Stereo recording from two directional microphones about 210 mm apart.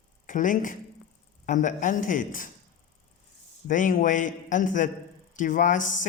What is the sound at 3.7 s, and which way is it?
Speech, 40° left (ahead or behind).